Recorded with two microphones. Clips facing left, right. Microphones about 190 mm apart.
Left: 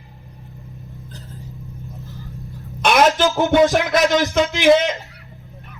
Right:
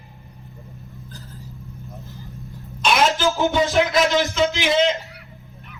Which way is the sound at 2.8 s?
55° left (ahead or behind).